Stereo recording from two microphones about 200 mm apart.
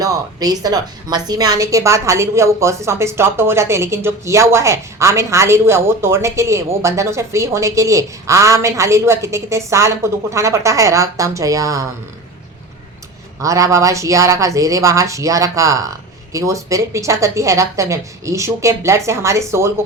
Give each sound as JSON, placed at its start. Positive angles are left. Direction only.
{"t": 0.0, "sound": "a woman's voice", "side_deg": -20}
{"t": 13.4, "sound": "a woman's voice", "side_deg": -15}